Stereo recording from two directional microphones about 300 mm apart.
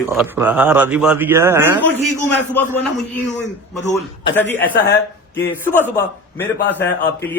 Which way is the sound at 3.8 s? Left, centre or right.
Left.